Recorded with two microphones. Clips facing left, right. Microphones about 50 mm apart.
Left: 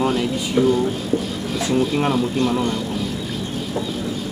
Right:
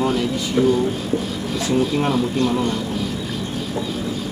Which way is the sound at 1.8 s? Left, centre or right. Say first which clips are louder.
Even; centre.